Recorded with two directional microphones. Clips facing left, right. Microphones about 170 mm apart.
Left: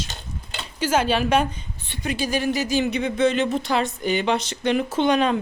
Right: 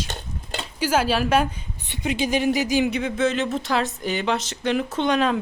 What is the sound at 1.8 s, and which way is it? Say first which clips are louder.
Speech: right 2 dB; 20° right (ahead or behind).